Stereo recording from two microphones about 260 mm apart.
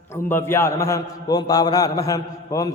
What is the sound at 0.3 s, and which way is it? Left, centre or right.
A man's voice, centre.